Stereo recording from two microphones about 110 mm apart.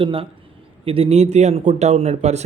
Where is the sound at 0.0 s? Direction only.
55° right (ahead or behind).